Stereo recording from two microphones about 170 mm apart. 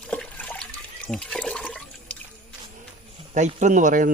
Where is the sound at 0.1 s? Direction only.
5° left (ahead or behind).